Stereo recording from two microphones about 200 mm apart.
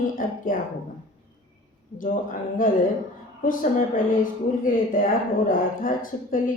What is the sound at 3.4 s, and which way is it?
Speech, 40° left (ahead or behind).